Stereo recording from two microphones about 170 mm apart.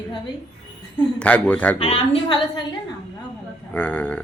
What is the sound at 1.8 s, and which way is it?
Speech, 35° left (ahead or behind).